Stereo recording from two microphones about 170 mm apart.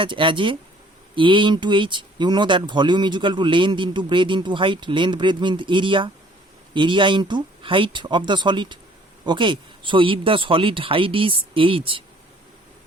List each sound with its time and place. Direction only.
0.0 s speech: 30° right (ahead or behind)